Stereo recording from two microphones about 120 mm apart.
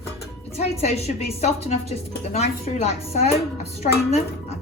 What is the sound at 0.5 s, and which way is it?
A woman's voice, 60° left (ahead or behind).